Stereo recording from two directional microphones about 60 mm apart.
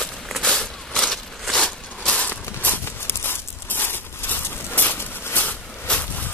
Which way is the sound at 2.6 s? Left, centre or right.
Left.